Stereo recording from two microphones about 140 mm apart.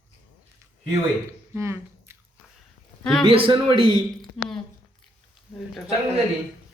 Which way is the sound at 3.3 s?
40° right (ahead or behind).